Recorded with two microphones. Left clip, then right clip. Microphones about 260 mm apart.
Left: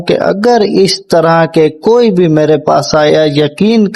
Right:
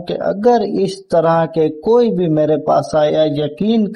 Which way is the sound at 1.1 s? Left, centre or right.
Left.